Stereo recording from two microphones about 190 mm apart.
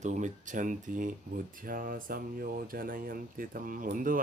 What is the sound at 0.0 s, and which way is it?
Speech, 40° right (ahead or behind).